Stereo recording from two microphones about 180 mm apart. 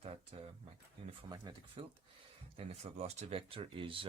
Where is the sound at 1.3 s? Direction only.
25° right (ahead or behind).